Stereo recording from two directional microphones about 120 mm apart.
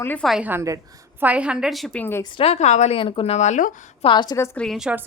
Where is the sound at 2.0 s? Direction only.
20° left (ahead or behind).